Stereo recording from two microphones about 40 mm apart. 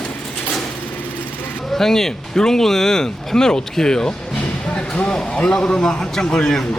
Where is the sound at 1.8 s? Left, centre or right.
Centre.